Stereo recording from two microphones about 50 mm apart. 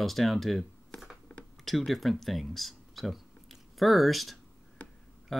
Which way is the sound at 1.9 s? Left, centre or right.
Centre.